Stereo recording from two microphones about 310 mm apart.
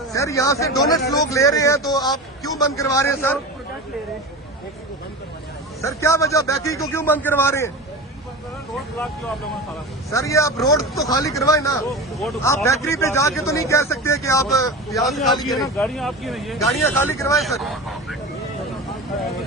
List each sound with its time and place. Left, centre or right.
0.1 s a man's voice: centre
5.8 s speech: centre
10.1 s speech: centre
15.0 s speech: centre
15.4 s speech: centre
15.6 s speech: centre